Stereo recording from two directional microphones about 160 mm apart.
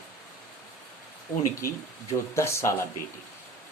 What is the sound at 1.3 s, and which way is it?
Speech, 20° left (ahead or behind).